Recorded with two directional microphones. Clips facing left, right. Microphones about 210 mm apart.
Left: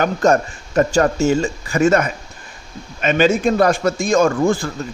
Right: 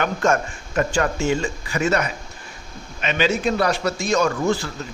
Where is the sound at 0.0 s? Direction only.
40° left (ahead or behind).